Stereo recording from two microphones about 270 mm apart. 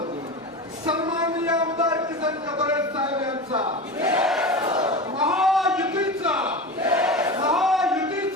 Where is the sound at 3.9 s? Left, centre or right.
Centre.